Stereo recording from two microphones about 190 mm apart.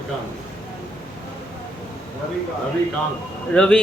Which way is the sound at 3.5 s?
5° left (ahead or behind).